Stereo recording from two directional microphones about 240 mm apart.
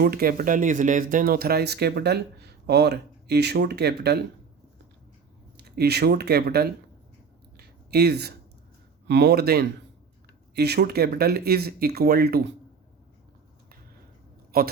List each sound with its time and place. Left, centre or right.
0.0 s speech: right
5.5 s speech: right
7.5 s a sound: right
9.0 s speech: right
14.5 s speech: right